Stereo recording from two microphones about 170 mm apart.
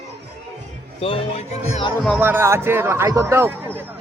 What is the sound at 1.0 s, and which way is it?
Speech, 35° left (ahead or behind).